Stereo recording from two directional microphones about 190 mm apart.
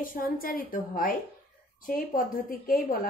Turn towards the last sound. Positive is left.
turn(degrees=50)  # may be behind; listen again after turning